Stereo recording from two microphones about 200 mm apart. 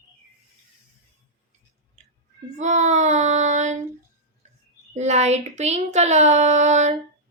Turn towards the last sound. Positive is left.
turn(degrees=-35)  # may be behind; listen again after turning